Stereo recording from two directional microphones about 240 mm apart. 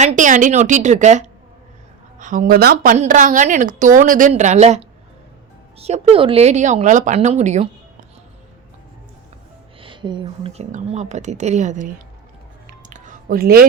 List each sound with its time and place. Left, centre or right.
0.0 s a woman's voice: right
9.8 s a woman's voice: centre
12.9 s a sound: right